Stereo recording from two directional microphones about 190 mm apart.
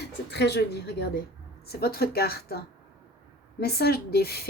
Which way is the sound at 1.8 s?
55° left (ahead or behind).